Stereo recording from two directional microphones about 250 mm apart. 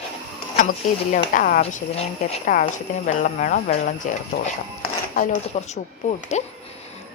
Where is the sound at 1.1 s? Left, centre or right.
Left.